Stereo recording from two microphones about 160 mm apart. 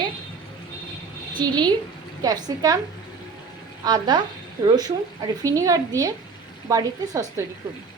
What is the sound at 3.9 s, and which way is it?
A woman's voice, 25° right (ahead or behind).